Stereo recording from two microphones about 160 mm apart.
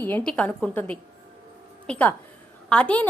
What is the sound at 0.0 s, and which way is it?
A woman's voice, 10° left (ahead or behind).